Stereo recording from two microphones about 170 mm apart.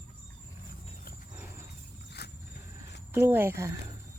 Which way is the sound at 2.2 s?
75° left (ahead or behind).